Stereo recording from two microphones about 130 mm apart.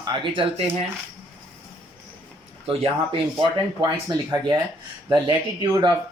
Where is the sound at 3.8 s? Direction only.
30° right (ahead or behind).